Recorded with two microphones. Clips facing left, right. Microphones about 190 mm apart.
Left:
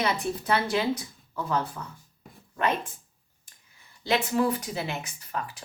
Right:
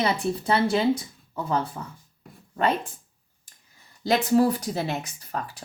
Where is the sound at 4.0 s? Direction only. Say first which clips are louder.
Right 5 dB; 40° right (ahead or behind).